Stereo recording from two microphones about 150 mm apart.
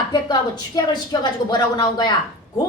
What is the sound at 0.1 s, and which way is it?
A woman's voice, 30° left (ahead or behind).